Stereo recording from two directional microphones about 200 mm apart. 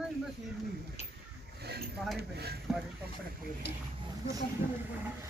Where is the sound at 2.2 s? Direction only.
55° right (ahead or behind).